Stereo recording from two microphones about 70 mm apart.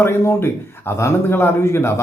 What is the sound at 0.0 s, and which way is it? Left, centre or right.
Speech, left.